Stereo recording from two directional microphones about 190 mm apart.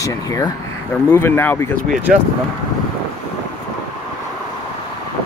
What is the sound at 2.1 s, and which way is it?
Speech, centre (ahead or behind).